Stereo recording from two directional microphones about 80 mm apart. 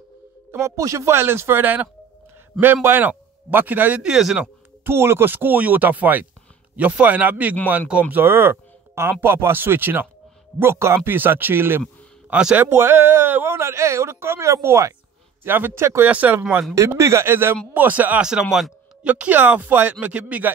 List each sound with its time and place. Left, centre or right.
0.5 s a man's voice: right
4.0 s speech: centre
4.8 s speech: right
12.3 s speech: centre
12.5 s speech: right
15.4 s speech: right
16.1 s speech: centre
16.7 s speech: right
18.2 s speech: centre
19.0 s speech: centre